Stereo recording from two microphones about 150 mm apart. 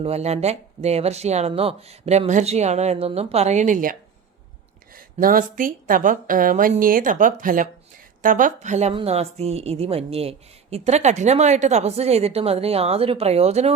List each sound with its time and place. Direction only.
0.0 s a woman's voice: 45° right (ahead or behind); by 3.9 s 60° right (ahead or behind)
5.2 s a woman's voice: 65° right (ahead or behind); by 13.7 s 45° right (ahead or behind)